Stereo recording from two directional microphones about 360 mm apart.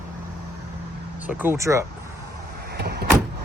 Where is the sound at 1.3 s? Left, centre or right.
Centre.